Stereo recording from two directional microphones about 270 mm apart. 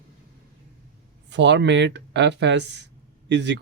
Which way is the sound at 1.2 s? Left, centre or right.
Right.